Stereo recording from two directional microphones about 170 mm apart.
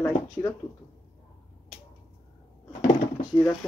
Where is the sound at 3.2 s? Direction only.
20° left (ahead or behind).